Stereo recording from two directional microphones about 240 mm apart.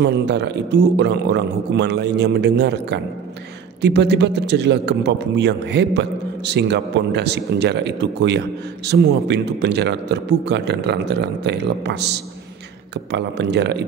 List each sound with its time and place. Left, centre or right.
0.0 s a man's voice: right